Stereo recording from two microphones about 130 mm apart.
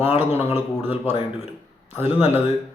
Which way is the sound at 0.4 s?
15° right (ahead or behind).